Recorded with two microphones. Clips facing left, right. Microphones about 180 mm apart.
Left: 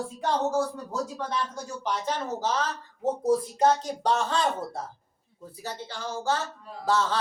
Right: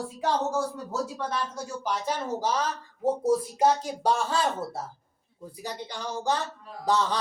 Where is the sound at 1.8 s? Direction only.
10° right (ahead or behind).